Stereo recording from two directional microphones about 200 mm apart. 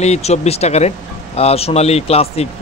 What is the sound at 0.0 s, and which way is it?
Speech, 35° left (ahead or behind).